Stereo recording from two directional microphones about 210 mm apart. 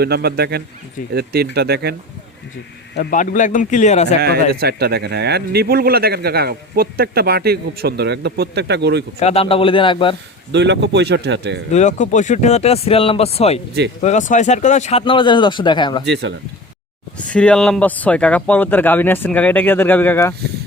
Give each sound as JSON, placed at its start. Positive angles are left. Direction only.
{"t": 0.0, "sound": "speech", "side_deg": -50}
{"t": 2.9, "sound": "a man's voice", "side_deg": 40}
{"t": 4.2, "sound": "speech", "side_deg": -50}
{"t": 9.1, "sound": "speech", "side_deg": 30}
{"t": 10.5, "sound": "speech", "side_deg": -55}
{"t": 11.7, "sound": "speech", "side_deg": 35}
{"t": 16.0, "sound": "speech", "side_deg": -55}
{"t": 17.3, "sound": "speech", "side_deg": 5}